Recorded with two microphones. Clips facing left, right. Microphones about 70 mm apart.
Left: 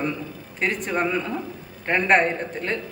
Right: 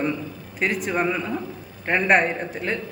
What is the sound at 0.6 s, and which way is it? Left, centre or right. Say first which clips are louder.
Speech: right 1 dB; centre.